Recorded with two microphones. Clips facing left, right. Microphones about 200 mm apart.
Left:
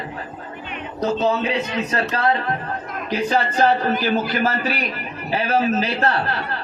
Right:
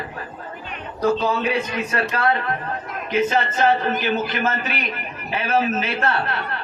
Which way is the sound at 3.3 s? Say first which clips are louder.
Left 5 dB; 40° left (ahead or behind).